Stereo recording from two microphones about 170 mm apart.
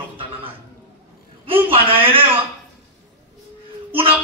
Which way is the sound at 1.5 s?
35° right (ahead or behind).